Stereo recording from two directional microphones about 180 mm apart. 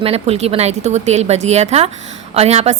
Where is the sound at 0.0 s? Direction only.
35° right (ahead or behind).